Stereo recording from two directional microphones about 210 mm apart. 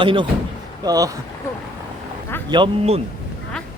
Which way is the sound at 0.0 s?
25° right (ahead or behind).